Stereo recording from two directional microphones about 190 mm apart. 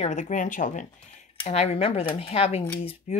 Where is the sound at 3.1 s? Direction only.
35° left (ahead or behind).